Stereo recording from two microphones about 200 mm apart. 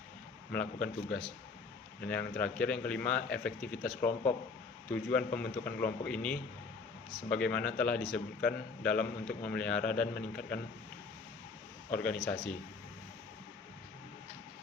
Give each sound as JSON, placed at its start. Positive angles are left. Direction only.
{"t": 0.5, "sound": "speech", "side_deg": 5}
{"t": 2.4, "sound": "speech", "side_deg": 5}
{"t": 11.9, "sound": "speech", "side_deg": 5}